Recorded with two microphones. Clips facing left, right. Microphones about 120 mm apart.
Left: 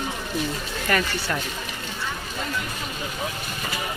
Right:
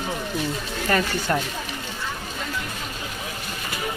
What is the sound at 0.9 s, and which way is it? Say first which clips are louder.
Speech: right 2 dB; 20° right (ahead or behind).